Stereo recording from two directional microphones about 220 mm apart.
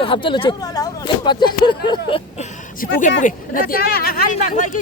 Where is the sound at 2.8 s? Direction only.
40° left (ahead or behind).